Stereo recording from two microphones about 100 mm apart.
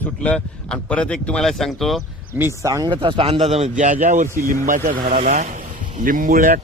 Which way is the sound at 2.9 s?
60° right (ahead or behind).